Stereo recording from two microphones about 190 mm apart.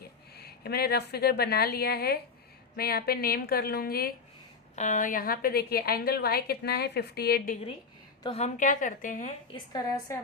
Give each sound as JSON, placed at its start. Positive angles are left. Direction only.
{"t": 0.3, "sound": "a woman's voice", "side_deg": 55}
{"t": 4.7, "sound": "a woman's voice", "side_deg": 40}
{"t": 8.2, "sound": "a woman's voice", "side_deg": 35}
{"t": 9.5, "sound": "a woman's voice", "side_deg": 20}